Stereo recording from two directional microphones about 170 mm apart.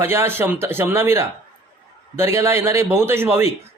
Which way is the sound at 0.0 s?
15° right (ahead or behind).